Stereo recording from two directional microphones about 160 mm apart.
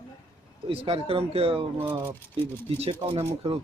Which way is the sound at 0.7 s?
35° right (ahead or behind).